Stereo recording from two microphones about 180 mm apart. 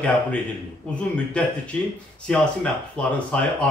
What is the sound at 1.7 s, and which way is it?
Speech, 5° left (ahead or behind).